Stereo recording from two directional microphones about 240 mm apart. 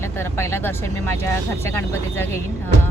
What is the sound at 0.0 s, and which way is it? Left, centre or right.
Speech, centre.